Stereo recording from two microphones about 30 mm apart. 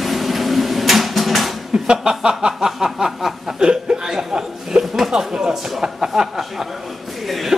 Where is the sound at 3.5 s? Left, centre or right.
Right.